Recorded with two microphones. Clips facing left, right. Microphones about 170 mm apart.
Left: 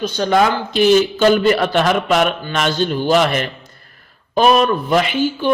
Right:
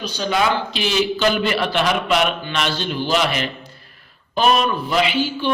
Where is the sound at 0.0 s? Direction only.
50° left (ahead or behind).